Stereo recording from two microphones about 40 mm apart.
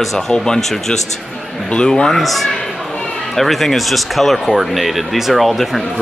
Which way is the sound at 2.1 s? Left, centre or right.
Centre.